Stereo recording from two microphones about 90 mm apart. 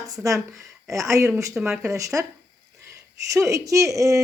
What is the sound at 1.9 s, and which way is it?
Speech, 35° right (ahead or behind).